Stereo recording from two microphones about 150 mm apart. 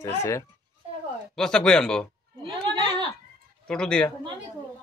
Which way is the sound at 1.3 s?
5° left (ahead or behind).